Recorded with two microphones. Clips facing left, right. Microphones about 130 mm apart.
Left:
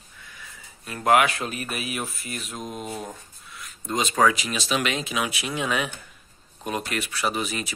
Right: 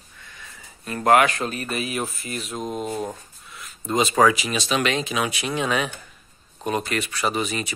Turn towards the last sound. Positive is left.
turn(degrees=0)  # may be behind; listen again after turning